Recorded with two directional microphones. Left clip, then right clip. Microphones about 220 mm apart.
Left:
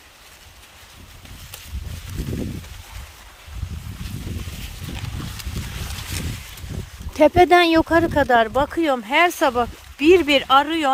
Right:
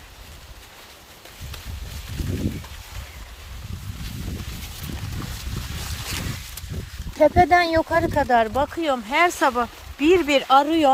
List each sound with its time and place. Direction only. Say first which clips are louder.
7.2 s speech: left 2 dB; 40° left (ahead or behind); by 10.9 s 10° left (ahead or behind)